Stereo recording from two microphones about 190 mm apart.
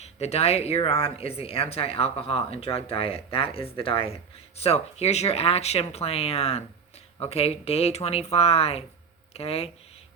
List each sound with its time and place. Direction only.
0.0 s speech: 35° left (ahead or behind)